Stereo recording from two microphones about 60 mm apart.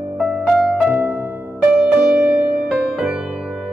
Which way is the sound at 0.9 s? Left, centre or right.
Right.